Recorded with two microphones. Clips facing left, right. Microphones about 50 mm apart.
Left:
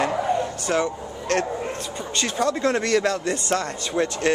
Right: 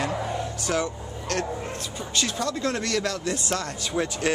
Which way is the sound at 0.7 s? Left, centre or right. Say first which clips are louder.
Left 3 dB; centre.